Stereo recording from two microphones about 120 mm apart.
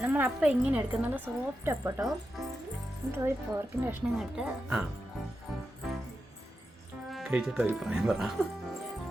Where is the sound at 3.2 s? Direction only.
25° right (ahead or behind).